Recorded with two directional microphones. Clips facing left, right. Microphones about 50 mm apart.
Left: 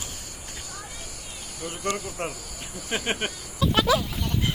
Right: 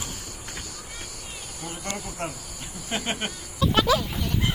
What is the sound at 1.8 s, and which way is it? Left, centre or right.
Speech, left.